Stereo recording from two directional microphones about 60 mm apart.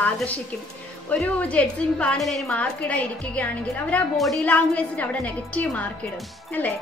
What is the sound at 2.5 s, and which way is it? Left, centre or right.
A woman's voice, left.